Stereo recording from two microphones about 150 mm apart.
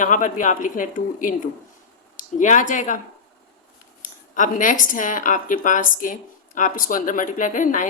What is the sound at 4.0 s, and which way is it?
Speech, 60° left (ahead or behind).